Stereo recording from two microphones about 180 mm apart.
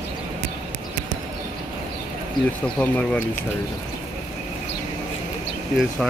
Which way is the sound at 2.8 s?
5° left (ahead or behind).